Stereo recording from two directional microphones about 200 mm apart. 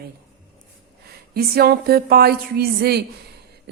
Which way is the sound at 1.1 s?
50° right (ahead or behind).